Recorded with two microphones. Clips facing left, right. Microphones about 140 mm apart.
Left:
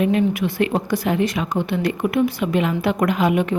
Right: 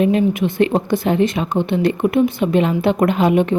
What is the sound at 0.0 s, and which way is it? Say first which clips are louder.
A woman's voice: right 3 dB; 25° right (ahead or behind).